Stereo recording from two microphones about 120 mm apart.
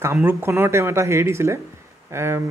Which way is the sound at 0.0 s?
20° right (ahead or behind).